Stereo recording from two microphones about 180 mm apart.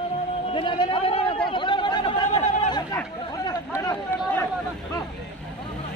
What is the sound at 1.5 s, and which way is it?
Chatter, 25° left (ahead or behind).